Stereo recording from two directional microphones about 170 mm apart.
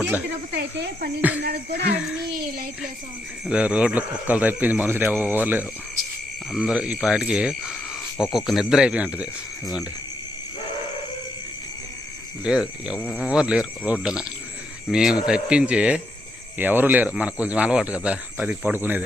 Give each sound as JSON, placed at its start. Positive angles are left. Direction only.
{"t": 0.5, "sound": "speech", "side_deg": -80}
{"t": 1.4, "sound": "speech", "side_deg": -70}
{"t": 3.4, "sound": "speech", "side_deg": -5}
{"t": 12.4, "sound": "speech", "side_deg": -5}